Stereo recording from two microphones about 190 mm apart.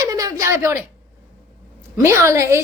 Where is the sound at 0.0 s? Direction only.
20° right (ahead or behind).